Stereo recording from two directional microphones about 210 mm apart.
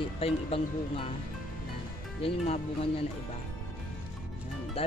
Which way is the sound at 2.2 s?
25° left (ahead or behind).